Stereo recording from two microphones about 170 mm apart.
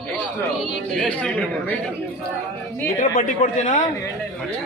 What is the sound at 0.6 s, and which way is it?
Speech, 5° left (ahead or behind).